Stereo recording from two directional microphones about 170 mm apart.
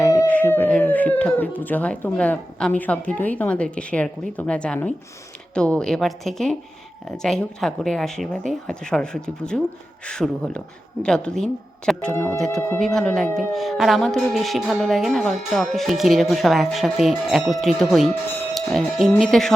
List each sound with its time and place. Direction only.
0.3 s a woman's voice: 10° left (ahead or behind)
12.1 s music: 15° left (ahead or behind)
12.4 s a woman's voice: centre (ahead or behind)